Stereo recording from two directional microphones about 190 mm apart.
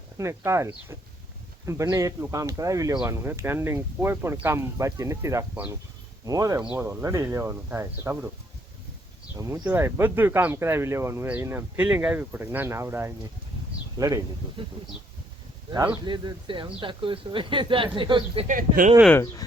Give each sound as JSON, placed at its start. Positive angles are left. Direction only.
{"t": 0.2, "sound": "speech", "side_deg": -15}
{"t": 9.3, "sound": "speech", "side_deg": -15}
{"t": 16.0, "sound": "speech", "side_deg": -25}
{"t": 18.4, "sound": "speech", "side_deg": -45}
{"t": 19.0, "sound": "speech", "side_deg": 10}